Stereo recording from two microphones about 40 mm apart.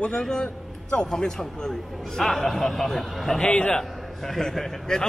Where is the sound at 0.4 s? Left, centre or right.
Left.